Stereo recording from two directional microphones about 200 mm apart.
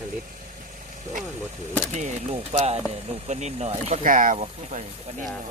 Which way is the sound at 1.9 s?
35° right (ahead or behind).